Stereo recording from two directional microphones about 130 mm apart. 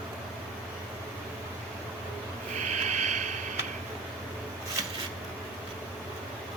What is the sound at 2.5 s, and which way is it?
Snort, 65° right (ahead or behind).